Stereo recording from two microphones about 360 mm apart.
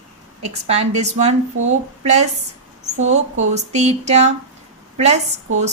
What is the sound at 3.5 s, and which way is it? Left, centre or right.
Speech, centre.